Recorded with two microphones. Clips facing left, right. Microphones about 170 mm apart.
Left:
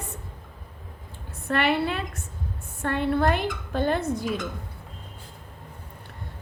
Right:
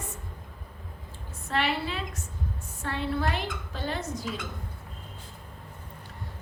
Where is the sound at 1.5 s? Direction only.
60° left (ahead or behind).